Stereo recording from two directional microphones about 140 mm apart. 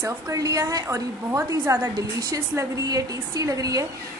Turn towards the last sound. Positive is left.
turn(degrees=-25)  # may be behind; listen again after turning